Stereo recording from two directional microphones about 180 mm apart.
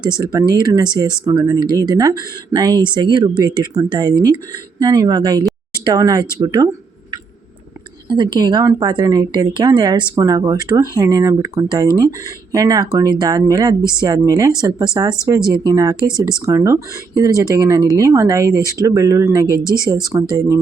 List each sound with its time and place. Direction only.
0.0 s speech: 25° right (ahead or behind)
8.0 s speech: 25° right (ahead or behind)